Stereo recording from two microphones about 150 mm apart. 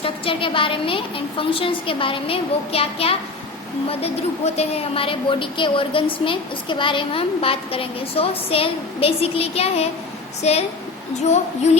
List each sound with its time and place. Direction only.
0.0 s a woman's voice: 35° left (ahead or behind)